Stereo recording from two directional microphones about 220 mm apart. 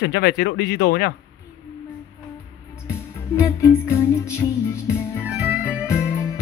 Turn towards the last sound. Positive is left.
turn(degrees=10)  # may be behind; listen again after turning